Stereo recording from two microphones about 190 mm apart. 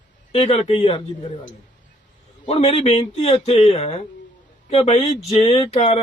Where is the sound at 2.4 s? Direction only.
30° left (ahead or behind).